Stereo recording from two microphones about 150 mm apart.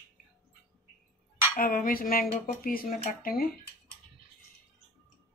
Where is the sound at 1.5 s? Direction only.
70° left (ahead or behind).